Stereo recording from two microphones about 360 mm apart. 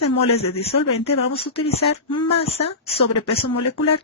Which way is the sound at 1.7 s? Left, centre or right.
Left.